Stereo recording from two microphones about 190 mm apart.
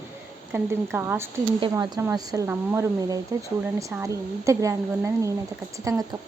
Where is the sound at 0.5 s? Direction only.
10° right (ahead or behind).